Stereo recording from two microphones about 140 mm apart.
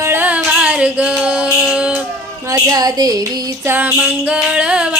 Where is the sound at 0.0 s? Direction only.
15° right (ahead or behind).